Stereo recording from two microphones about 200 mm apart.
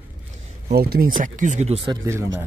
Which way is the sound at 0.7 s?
50° right (ahead or behind).